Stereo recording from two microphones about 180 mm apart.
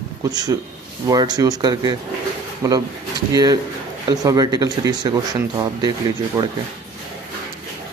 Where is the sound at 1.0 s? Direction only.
20° right (ahead or behind).